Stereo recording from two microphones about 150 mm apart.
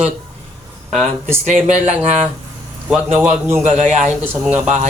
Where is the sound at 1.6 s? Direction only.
50° right (ahead or behind).